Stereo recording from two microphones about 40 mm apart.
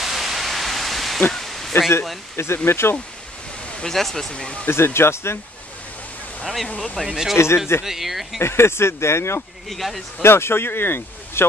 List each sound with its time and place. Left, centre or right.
0.0 s pink noise: centre
1.3 s a sound: centre
2.3 s speech: left
3.8 s speech: centre
4.3 s speech: left
4.6 s speech: left
6.4 s speech: centre
7.0 s speech: left
7.3 s speech: left
7.8 s speech: centre
8.4 s speech: left
9.7 s speech: centre
10.2 s speech: left